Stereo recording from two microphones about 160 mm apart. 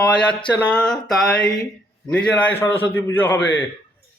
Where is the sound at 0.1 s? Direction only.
5° left (ahead or behind).